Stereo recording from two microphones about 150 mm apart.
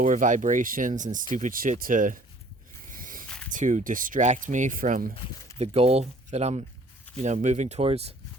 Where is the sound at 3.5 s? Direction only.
55° right (ahead or behind).